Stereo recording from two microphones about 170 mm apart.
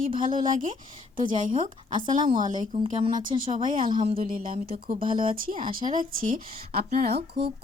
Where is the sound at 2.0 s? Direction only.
50° right (ahead or behind).